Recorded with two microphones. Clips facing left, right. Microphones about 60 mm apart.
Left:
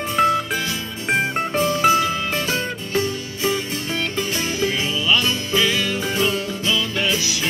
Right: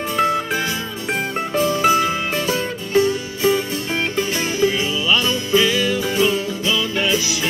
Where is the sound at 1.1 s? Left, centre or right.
Left.